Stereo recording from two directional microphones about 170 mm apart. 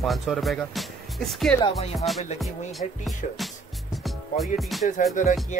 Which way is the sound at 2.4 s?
Centre (ahead or behind).